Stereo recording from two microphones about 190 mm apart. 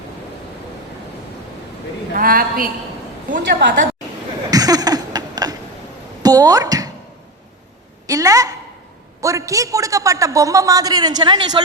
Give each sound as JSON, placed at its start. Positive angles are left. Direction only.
{"t": 2.1, "sound": "a woman's voice", "side_deg": -50}
{"t": 4.5, "sound": "a sound", "side_deg": -20}
{"t": 8.0, "sound": "a woman's voice", "side_deg": -15}